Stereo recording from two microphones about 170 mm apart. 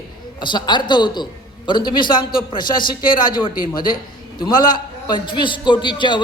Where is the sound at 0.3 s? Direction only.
25° left (ahead or behind).